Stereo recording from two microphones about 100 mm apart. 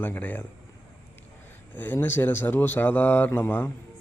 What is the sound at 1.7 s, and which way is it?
A man's voice, 15° left (ahead or behind).